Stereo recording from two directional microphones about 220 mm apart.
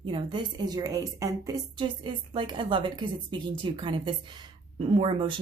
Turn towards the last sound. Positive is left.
turn(degrees=-20)  # may be behind; listen again after turning